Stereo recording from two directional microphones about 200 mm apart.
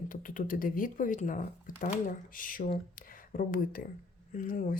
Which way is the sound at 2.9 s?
45° left (ahead or behind).